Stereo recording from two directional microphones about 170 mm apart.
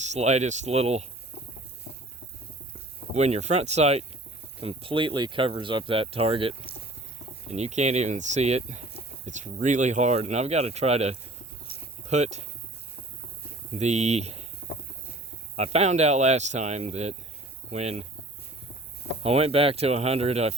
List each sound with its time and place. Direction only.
0.0 s speech: 40° right (ahead or behind)
3.2 s speech: 40° right (ahead or behind)
11.7 s a sound: 65° left (ahead or behind)
12.0 s speech: 40° right (ahead or behind)
13.7 s speech: 40° right (ahead or behind)
15.5 s speech: 40° right (ahead or behind)
19.2 s speech: 35° right (ahead or behind)